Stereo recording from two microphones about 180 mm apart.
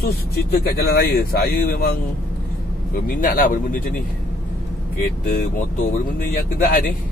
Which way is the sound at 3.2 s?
50° left (ahead or behind).